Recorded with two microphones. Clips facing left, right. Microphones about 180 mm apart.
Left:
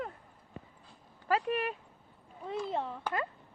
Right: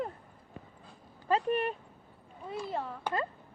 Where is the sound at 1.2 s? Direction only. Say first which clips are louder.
Right 2 dB; 30° right (ahead or behind).